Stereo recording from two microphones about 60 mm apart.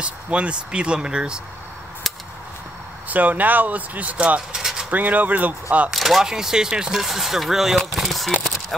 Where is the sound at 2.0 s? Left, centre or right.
Centre.